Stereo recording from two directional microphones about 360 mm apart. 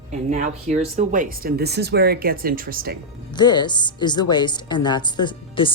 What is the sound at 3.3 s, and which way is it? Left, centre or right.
A woman's voice, centre.